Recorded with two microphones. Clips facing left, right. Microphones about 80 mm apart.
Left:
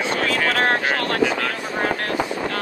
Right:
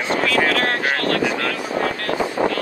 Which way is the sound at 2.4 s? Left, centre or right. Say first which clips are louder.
Right 7 dB; right.